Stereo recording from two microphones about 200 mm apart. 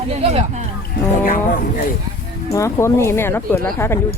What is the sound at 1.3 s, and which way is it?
Speech, 45° left (ahead or behind).